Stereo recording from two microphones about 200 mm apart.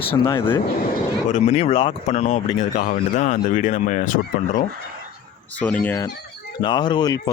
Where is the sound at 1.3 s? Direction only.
30° left (ahead or behind).